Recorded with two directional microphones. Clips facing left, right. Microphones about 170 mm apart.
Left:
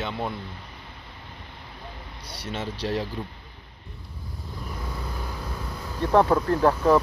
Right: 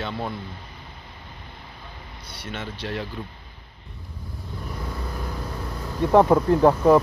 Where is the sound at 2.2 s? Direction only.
35° left (ahead or behind).